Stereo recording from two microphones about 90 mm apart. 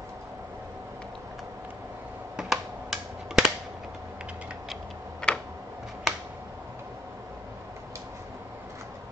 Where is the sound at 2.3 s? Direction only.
5° right (ahead or behind).